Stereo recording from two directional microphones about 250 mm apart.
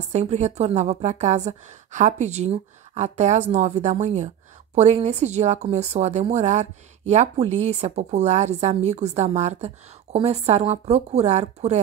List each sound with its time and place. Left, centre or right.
0.1 s a woman's voice: right